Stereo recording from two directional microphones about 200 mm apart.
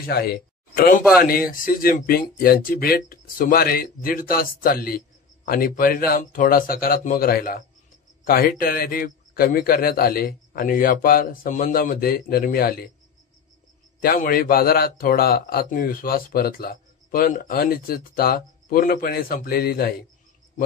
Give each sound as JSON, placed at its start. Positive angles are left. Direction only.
{"t": 0.0, "sound": "speech", "side_deg": 50}
{"t": 14.0, "sound": "speech", "side_deg": 45}